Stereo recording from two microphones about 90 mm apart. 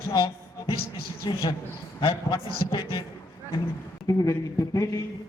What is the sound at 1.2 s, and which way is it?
Speech, 50° left (ahead or behind).